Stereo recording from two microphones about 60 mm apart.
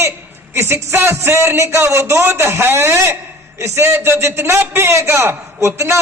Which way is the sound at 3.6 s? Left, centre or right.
Right.